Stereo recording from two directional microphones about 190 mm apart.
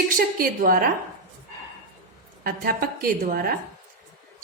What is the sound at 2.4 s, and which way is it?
A woman's voice, 50° right (ahead or behind).